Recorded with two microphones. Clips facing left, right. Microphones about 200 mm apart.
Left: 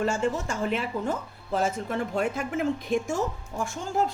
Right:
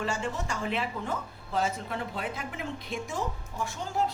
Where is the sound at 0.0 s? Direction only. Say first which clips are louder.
Left 6 dB; 45° left (ahead or behind).